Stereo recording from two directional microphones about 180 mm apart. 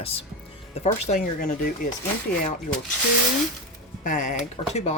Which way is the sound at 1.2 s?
55° left (ahead or behind).